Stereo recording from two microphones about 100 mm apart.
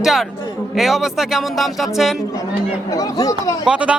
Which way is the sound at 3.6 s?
10° right (ahead or behind).